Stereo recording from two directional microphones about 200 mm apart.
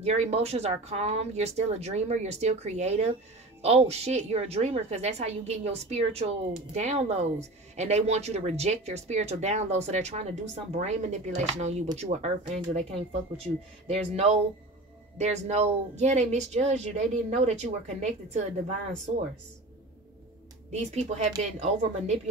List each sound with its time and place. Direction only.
0.0 s a woman's voice: 30° right (ahead or behind)
20.7 s a woman's voice: 35° right (ahead or behind)